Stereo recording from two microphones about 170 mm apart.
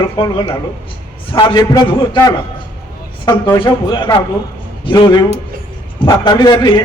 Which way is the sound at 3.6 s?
25° left (ahead or behind).